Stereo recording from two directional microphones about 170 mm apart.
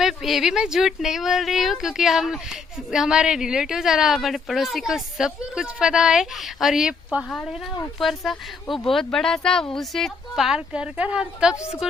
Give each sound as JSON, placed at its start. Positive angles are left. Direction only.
{"t": 0.0, "sound": "a woman's voice", "side_deg": 0}